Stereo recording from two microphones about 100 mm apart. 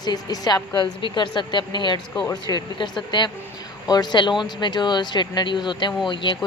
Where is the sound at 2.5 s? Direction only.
35° left (ahead or behind).